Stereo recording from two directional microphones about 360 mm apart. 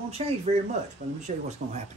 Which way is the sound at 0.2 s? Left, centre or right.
Centre.